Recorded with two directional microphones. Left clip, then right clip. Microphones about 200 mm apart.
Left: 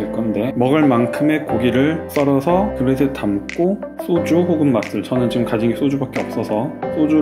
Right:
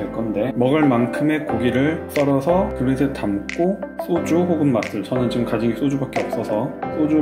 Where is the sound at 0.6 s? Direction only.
35° left (ahead or behind).